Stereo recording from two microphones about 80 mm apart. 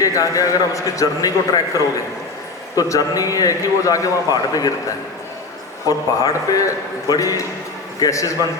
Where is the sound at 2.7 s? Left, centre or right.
Left.